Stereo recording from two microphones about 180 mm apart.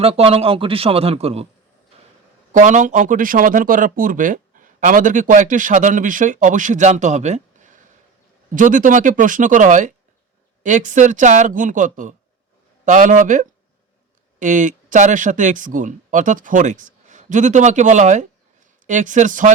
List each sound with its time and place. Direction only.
0.0 s speech: 35° right (ahead or behind)
2.5 s speech: 45° right (ahead or behind)